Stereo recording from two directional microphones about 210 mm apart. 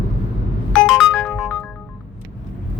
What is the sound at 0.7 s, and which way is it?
Ringtone, centre (ahead or behind).